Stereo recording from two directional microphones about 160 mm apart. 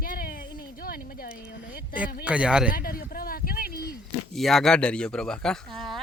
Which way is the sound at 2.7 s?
65° left (ahead or behind).